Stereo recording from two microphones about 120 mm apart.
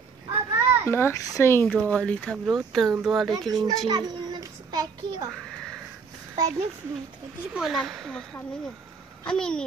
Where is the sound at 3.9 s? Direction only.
35° right (ahead or behind).